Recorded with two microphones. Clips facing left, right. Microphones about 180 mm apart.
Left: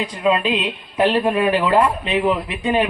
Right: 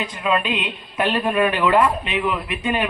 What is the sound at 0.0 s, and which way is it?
Speech, 35° left (ahead or behind).